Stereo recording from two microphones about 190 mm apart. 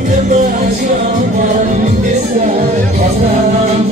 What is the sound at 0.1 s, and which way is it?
Music, 40° right (ahead or behind).